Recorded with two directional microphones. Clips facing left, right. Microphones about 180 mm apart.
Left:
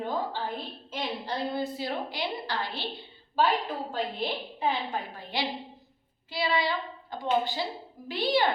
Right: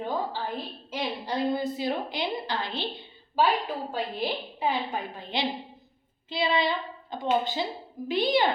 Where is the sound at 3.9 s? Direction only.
10° right (ahead or behind).